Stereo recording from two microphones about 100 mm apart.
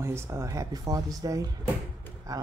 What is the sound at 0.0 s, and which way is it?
Speech, 25° right (ahead or behind).